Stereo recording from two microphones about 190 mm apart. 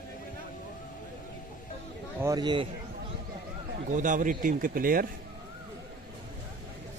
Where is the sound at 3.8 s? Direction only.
40° right (ahead or behind).